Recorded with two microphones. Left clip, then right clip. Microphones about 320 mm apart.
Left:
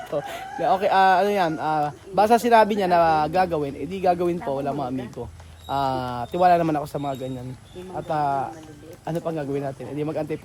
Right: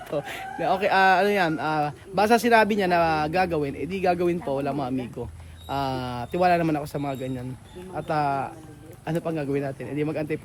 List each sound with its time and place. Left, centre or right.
0.1 s a man's voice: centre